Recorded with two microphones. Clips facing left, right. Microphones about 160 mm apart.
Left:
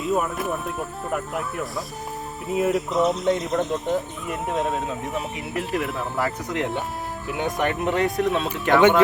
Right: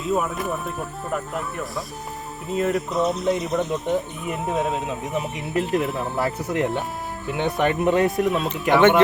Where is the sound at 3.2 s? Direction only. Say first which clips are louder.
Even; 5° right (ahead or behind).